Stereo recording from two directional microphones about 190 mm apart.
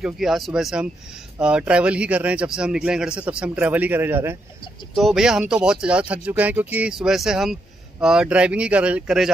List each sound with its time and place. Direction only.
0.0 s speech: centre (ahead or behind)